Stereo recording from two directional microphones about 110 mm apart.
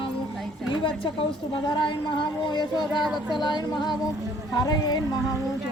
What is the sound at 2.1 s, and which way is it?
Child singing, 45° left (ahead or behind).